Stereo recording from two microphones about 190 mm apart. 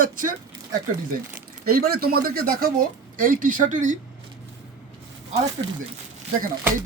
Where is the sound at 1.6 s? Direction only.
50° right (ahead or behind).